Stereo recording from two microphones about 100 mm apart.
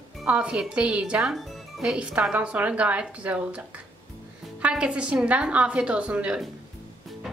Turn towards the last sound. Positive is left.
turn(degrees=-10)  # may be behind; listen again after turning